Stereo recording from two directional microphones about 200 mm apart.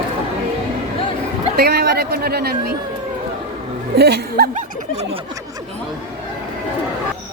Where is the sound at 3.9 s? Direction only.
55° right (ahead or behind).